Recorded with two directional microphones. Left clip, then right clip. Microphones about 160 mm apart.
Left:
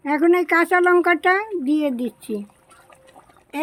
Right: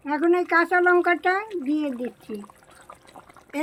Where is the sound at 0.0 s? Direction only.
60° left (ahead or behind); by 2.3 s 90° left.